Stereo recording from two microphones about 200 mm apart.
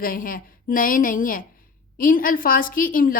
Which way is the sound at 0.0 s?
45° left (ahead or behind).